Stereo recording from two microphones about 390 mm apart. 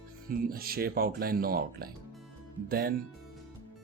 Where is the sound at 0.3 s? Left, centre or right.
Right.